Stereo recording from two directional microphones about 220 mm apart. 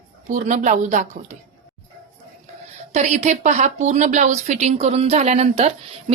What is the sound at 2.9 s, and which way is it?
A woman's voice, 30° right (ahead or behind).